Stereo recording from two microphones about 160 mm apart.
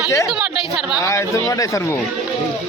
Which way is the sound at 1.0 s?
20° left (ahead or behind).